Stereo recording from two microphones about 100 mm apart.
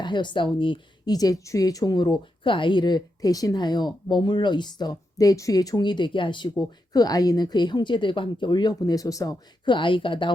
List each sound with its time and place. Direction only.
0.0 s a woman's voice: 50° left (ahead or behind)
1.1 s speech: 35° left (ahead or behind); by 6.5 s 55° left (ahead or behind)
6.9 s speech: 40° left (ahead or behind)
9.6 s speech: 55° left (ahead or behind)